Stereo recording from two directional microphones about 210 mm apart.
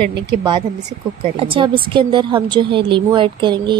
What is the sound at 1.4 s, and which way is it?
A woman's voice, 25° right (ahead or behind).